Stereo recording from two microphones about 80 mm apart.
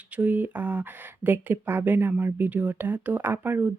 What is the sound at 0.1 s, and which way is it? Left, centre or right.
Speech, centre.